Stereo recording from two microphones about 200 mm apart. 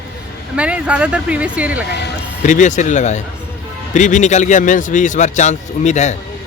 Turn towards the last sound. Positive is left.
turn(degrees=35)  # may be behind; listen again after turning